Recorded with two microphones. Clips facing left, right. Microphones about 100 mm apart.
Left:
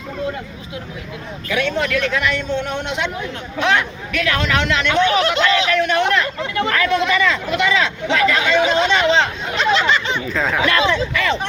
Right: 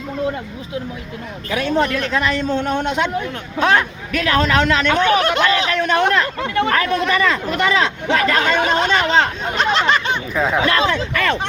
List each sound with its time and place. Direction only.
1.5 s speech: 40° right (ahead or behind)
5.6 s speech: 35° right (ahead or behind)
10.3 s speech: 15° right (ahead or behind)
10.6 s speech: 35° right (ahead or behind)
10.9 s speech: 50° right (ahead or behind)